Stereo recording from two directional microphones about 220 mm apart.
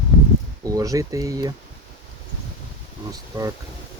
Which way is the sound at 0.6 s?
15° right (ahead or behind).